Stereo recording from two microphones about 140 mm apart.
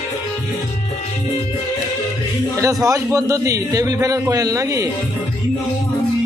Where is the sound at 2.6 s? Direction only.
25° right (ahead or behind).